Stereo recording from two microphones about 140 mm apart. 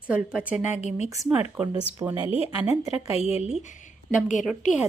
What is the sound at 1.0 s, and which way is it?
A woman's voice, 25° right (ahead or behind).